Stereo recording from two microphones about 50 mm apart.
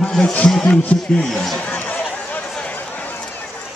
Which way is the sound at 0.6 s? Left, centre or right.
Left.